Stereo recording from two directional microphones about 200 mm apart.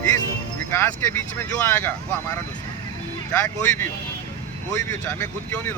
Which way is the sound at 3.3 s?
10° left (ahead or behind).